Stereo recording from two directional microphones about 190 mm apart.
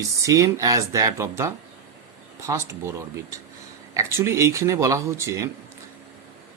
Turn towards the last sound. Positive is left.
turn(degrees=-15)  # may be behind; listen again after turning